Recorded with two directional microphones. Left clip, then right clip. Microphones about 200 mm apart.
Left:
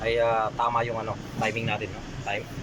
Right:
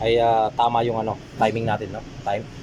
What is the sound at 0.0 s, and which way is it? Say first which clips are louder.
Speech: right 6 dB; 25° right (ahead or behind).